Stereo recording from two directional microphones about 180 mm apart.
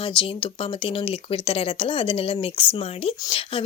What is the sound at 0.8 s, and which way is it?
Speech, 30° left (ahead or behind).